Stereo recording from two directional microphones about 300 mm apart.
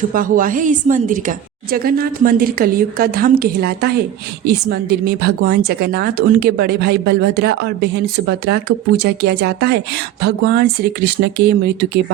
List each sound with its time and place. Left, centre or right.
0.1 s a woman's voice: right